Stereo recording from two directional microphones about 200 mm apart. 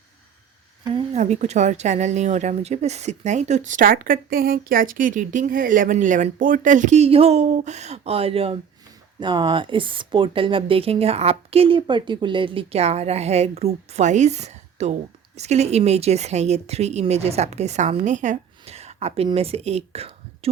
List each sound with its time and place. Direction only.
0.9 s a woman's voice: 35° right (ahead or behind)